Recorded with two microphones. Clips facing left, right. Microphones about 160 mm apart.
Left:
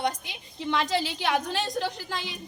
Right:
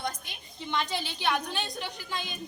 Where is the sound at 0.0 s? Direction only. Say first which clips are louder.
Left 6 dB; 90° left.